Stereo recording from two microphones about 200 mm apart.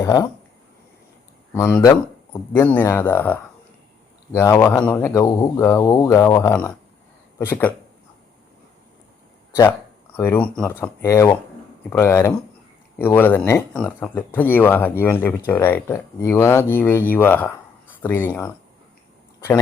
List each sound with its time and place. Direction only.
0.0 s speech: 20° left (ahead or behind)
1.5 s speech: 15° left (ahead or behind)
10.2 s speech: 10° left (ahead or behind)